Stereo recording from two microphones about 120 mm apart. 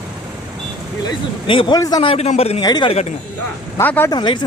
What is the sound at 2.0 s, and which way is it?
Speech, 55° left (ahead or behind).